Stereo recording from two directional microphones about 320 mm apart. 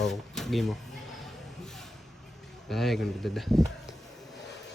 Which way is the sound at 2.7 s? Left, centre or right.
Centre.